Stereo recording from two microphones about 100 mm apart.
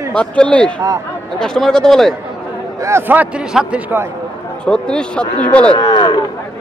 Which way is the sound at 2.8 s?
25° right (ahead or behind).